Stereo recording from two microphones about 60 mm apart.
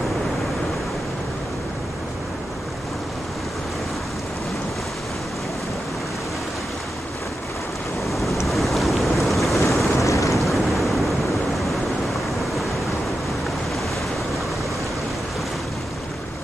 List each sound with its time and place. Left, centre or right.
8.1 s wind noise: centre
8.5 s boat: centre
9.7 s vehicle: centre
9.9 s waves: left
10.3 s waves: centre